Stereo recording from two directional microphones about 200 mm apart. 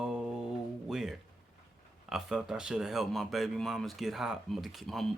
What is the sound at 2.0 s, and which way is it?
Speech, centre (ahead or behind).